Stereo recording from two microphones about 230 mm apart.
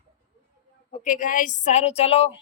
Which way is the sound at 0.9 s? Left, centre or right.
Left.